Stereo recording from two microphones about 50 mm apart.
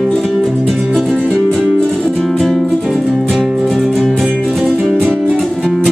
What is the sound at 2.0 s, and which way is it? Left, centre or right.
Music, centre.